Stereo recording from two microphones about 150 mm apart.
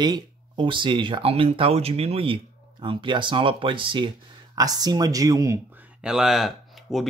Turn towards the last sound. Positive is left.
turn(degrees=0)  # may be behind; listen again after turning